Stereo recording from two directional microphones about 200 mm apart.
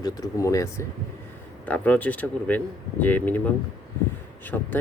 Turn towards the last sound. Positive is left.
turn(degrees=10)  # may be behind; listen again after turning